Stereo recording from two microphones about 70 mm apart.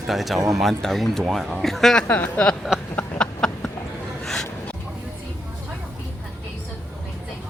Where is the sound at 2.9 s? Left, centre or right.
Left.